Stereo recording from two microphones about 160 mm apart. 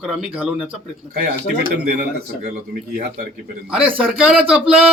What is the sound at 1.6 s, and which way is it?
Speech, 70° right (ahead or behind).